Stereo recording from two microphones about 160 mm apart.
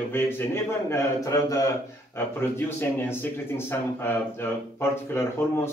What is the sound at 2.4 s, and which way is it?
A man's voice, 15° left (ahead or behind).